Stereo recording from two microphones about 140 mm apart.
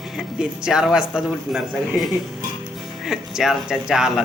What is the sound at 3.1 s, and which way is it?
Speech, centre (ahead or behind).